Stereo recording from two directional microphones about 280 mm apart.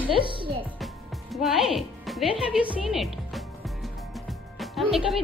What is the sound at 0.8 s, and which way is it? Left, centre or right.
Music, centre.